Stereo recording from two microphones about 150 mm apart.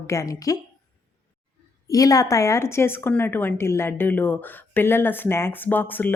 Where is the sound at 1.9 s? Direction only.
25° left (ahead or behind).